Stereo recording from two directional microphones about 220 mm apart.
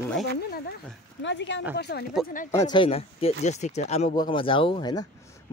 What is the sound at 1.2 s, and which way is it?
Speech, 55° left (ahead or behind).